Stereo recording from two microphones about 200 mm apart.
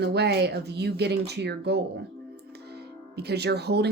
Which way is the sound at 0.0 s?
55° right (ahead or behind).